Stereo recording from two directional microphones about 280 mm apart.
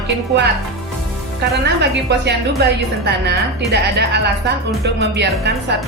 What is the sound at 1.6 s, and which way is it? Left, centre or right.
A woman's voice, right.